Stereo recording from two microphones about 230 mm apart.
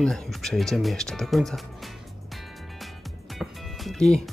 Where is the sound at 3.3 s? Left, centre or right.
Centre.